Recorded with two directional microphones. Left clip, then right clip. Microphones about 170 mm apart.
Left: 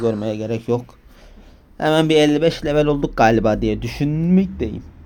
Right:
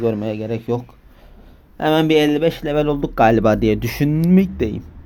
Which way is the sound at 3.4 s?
15° right (ahead or behind).